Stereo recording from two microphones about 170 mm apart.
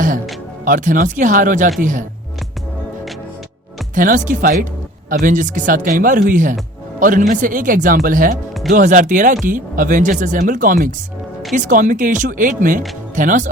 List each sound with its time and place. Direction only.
0.6 s speech: 50° right (ahead or behind)
3.9 s speech: 50° right (ahead or behind)